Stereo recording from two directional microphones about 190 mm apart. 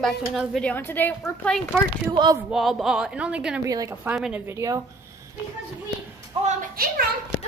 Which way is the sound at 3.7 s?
20° right (ahead or behind).